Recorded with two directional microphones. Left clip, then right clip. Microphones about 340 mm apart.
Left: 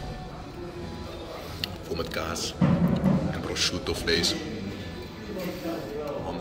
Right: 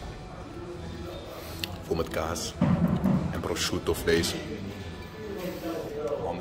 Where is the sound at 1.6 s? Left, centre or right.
Right.